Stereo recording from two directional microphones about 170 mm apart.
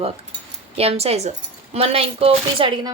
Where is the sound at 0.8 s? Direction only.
35° right (ahead or behind).